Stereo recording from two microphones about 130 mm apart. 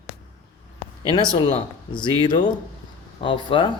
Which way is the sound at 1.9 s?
35° left (ahead or behind).